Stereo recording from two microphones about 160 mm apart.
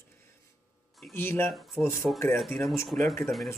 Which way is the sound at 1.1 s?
15° left (ahead or behind).